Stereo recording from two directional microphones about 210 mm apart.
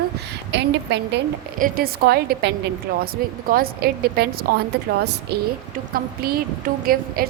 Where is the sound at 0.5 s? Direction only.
55° right (ahead or behind).